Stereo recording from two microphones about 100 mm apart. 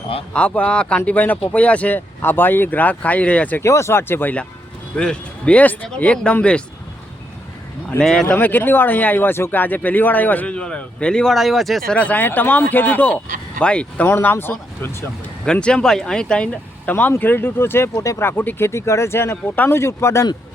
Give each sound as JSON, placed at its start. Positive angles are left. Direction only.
{"t": 0.3, "sound": "speech", "side_deg": 15}
{"t": 3.6, "sound": "speech", "side_deg": 30}
{"t": 7.9, "sound": "a man's voice", "side_deg": 5}
{"t": 8.4, "sound": "speech", "side_deg": 20}
{"t": 11.9, "sound": "speech", "side_deg": 15}
{"t": 15.4, "sound": "speech", "side_deg": 10}